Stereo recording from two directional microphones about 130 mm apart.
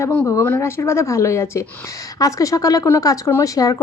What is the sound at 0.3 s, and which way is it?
Speech, 25° left (ahead or behind).